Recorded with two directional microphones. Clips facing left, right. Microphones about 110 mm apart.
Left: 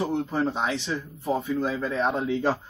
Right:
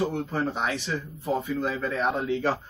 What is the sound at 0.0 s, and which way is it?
Speech, 15° left (ahead or behind).